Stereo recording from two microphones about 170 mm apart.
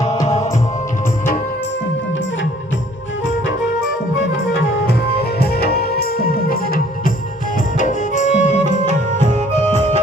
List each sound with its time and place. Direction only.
4.5 s music: 75° left (ahead or behind); by 7.1 s 55° left (ahead or behind)
7.8 s music: 45° left (ahead or behind)